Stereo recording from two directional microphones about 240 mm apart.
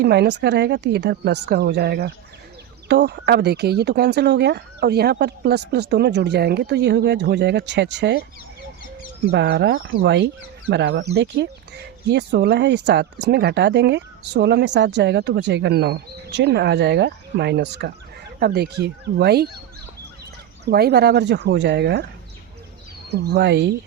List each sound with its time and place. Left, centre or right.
0.0 s speech: right
9.3 s speech: right
20.7 s speech: right
23.0 s speech: right